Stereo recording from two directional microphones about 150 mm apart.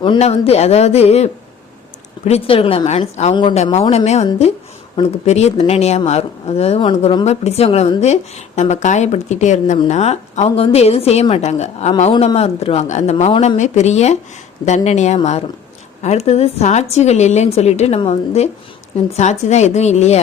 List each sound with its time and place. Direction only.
0.2 s a woman's voice: 45° left (ahead or behind)
7.3 s a woman's voice: 45° left (ahead or behind)
13.3 s speech: 35° left (ahead or behind)
13.6 s a woman's voice: 50° left (ahead or behind)